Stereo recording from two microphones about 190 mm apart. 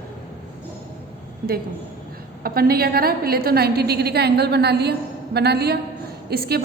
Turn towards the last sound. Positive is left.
turn(degrees=-55)  # may be behind; listen again after turning